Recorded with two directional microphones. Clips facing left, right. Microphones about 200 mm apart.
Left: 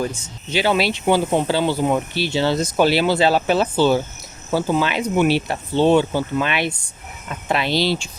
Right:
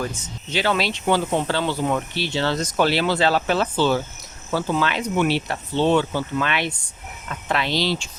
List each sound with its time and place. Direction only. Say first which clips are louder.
0.5 s speech: left 3 dB; 10° left (ahead or behind)
7.6 s speech: left 4 dB; 10° left (ahead or behind)